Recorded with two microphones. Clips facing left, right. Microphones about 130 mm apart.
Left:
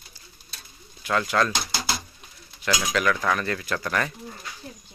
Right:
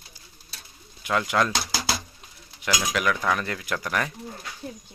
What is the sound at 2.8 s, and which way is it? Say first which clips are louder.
Speech: left 1 dB; 10° right (ahead or behind).